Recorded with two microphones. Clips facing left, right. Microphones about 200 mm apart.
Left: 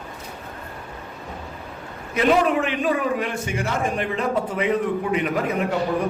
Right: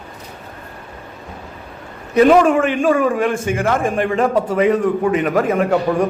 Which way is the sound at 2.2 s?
45° right (ahead or behind).